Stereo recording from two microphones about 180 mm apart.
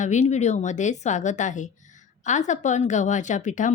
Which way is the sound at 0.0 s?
40° left (ahead or behind).